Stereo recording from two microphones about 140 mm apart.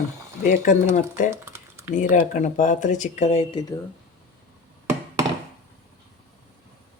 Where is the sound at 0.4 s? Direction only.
80° left.